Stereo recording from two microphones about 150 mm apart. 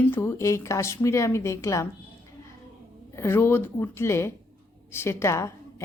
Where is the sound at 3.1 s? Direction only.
15° left (ahead or behind).